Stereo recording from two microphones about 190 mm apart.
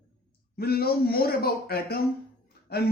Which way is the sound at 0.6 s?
55° left (ahead or behind).